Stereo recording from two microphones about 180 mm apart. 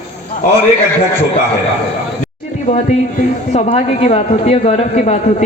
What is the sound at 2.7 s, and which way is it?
A man's voice, 40° left (ahead or behind).